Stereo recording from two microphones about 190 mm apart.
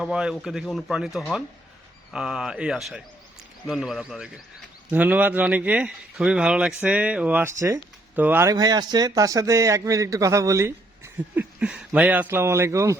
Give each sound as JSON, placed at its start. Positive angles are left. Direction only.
{"t": 0.0, "sound": "speech", "side_deg": -5}